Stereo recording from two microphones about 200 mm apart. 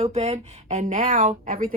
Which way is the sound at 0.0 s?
30° right (ahead or behind).